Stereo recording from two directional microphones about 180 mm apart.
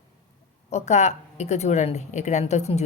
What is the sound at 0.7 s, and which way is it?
Speech, 40° left (ahead or behind).